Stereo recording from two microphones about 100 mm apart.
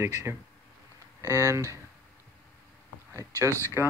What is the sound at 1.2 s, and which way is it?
Speech, 30° right (ahead or behind).